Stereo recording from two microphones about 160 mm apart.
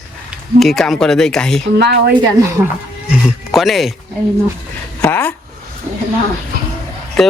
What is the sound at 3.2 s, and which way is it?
Speech, centre (ahead or behind).